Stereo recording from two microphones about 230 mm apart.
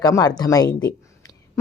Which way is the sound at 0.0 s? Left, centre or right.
Centre.